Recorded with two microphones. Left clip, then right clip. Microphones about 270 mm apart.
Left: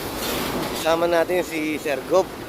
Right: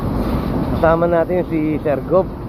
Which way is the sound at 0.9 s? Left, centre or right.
Left.